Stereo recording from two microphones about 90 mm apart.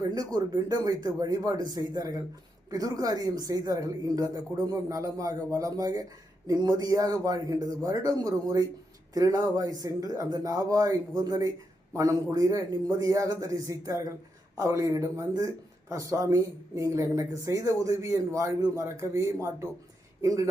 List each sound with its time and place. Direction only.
0.1 s speech: 45° right (ahead or behind)